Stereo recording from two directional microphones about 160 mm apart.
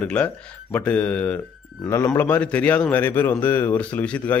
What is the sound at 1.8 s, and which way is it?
Speech, 20° left (ahead or behind).